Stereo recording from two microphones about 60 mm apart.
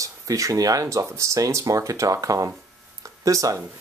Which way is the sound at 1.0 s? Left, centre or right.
Right.